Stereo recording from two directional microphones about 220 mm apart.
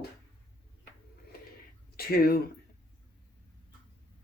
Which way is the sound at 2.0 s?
45° left (ahead or behind).